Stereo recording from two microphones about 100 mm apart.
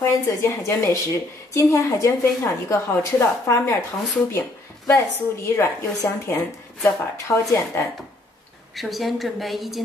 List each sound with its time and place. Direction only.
0.0 s a woman's voice: 30° left (ahead or behind)
4.8 s a woman's voice: 25° left (ahead or behind)
8.7 s a woman's voice: centre (ahead or behind)